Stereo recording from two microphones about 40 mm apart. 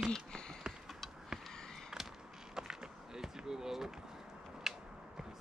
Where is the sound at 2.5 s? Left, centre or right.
Centre.